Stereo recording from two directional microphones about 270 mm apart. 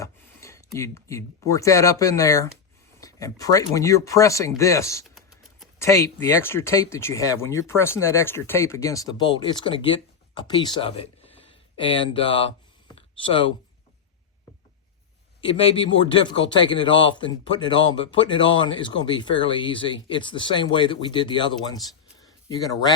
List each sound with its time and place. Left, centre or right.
0.0 s a man's voice: centre
5.1 s typing: centre
5.9 s a man's voice: centre
13.0 s a sound: centre
15.4 s a man's voice: centre